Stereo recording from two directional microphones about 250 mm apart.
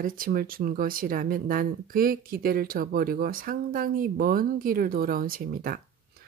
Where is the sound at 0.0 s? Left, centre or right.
Right.